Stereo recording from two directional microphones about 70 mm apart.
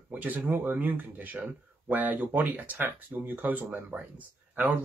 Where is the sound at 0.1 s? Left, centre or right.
Right.